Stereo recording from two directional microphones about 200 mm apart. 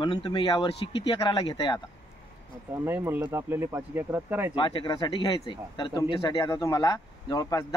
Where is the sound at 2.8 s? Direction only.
10° right (ahead or behind).